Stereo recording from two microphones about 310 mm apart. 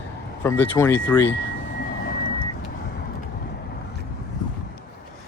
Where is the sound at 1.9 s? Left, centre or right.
Left.